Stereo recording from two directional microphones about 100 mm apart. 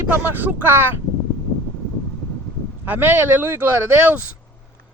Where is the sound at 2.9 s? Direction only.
20° right (ahead or behind).